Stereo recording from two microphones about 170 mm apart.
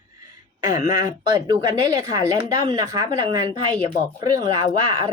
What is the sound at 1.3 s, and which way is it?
Speech, 25° right (ahead or behind).